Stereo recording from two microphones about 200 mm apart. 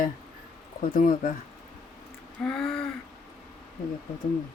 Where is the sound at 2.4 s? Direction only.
Centre (ahead or behind).